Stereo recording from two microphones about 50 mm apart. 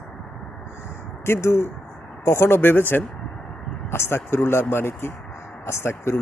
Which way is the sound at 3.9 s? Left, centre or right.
Left.